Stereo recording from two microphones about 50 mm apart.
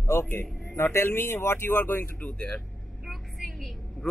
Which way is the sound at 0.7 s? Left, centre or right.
Left.